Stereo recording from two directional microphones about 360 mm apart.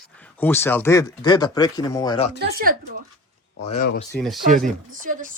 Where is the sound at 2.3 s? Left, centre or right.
Right.